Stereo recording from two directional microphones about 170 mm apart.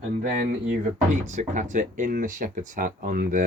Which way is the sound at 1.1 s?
45° right (ahead or behind).